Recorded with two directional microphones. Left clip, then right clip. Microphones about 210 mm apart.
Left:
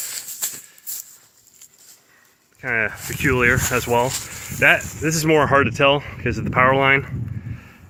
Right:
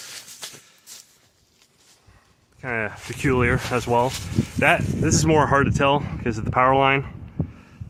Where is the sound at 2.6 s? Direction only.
5° right (ahead or behind).